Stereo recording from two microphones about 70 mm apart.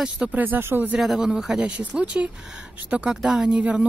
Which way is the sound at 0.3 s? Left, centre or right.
Right.